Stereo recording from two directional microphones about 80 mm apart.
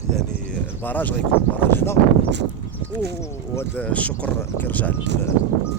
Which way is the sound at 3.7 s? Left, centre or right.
Centre.